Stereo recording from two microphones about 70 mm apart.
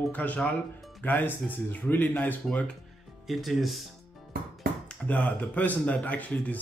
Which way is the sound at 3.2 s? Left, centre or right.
Centre.